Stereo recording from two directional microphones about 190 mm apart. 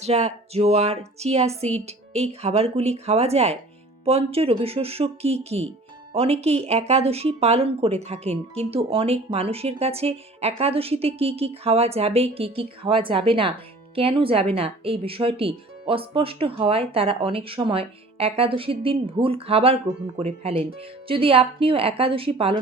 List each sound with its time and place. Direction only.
0.0 s speech: 35° right (ahead or behind)